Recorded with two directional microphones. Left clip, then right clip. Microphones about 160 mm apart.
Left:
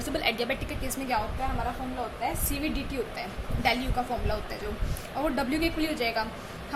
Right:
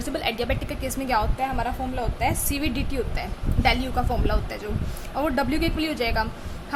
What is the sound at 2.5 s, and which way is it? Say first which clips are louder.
A woman's voice: right 4 dB; 20° right (ahead or behind).